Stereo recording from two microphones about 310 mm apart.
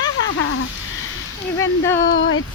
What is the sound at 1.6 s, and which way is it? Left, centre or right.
Speech, centre.